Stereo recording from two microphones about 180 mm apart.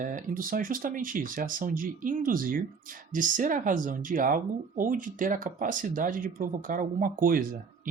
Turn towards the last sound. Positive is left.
turn(degrees=-50)  # may be behind; listen again after turning